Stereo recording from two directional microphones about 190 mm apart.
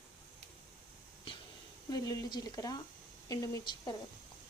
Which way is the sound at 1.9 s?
20° left (ahead or behind).